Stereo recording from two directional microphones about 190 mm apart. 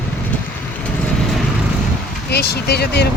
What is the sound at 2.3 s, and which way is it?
Speech, 60° left (ahead or behind).